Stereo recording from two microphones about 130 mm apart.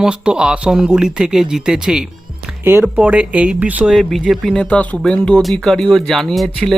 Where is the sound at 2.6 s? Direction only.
20° right (ahead or behind).